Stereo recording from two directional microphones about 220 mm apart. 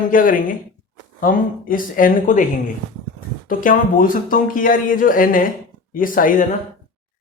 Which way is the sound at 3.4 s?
40° left (ahead or behind).